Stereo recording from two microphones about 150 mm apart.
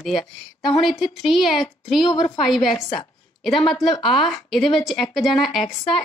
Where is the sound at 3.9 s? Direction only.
40° left (ahead or behind).